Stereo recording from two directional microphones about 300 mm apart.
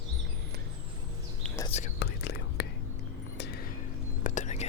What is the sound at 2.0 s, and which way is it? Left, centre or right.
Whispering, left.